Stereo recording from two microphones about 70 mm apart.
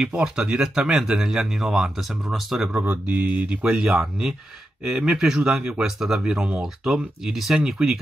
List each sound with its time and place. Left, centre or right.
0.0 s speech: centre
2.7 s speech: right